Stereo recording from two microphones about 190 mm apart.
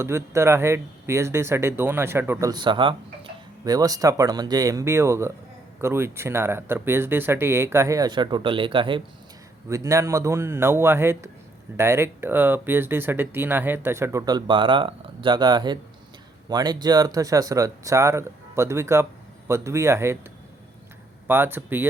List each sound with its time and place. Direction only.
0.0 s speech: 15° right (ahead or behind)
9.6 s speech: 15° right (ahead or behind)
21.2 s speech: 10° right (ahead or behind)